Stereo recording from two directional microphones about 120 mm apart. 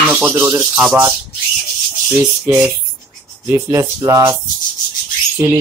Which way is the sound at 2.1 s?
10° right (ahead or behind).